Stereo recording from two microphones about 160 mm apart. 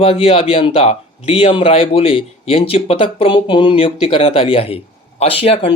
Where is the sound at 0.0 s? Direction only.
35° left (ahead or behind).